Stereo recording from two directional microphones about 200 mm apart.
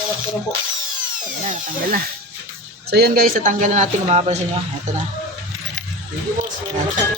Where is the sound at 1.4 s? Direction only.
40° right (ahead or behind).